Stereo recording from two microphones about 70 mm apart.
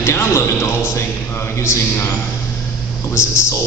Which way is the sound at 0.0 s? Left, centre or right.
Left.